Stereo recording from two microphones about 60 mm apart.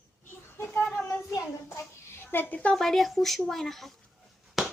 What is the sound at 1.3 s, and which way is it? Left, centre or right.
Child singing, left.